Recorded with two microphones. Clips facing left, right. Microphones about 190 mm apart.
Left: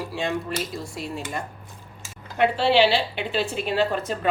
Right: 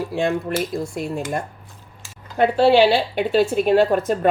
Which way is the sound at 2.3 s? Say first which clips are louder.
Right 5 dB; 40° right (ahead or behind).